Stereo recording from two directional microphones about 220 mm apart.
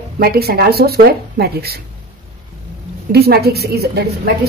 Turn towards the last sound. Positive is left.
turn(degrees=-45)  # may be behind; listen again after turning